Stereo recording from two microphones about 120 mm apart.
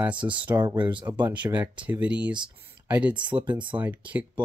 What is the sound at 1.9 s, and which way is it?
Speech, 10° right (ahead or behind).